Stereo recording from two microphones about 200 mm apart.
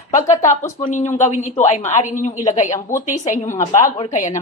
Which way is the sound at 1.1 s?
35° left (ahead or behind).